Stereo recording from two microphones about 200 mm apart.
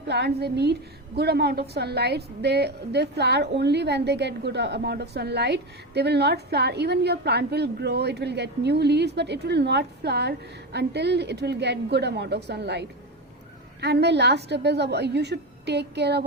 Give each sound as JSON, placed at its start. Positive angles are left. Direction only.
{"t": 0.1, "sound": "a woman's voice", "side_deg": -55}
{"t": 13.8, "sound": "a woman's voice", "side_deg": -55}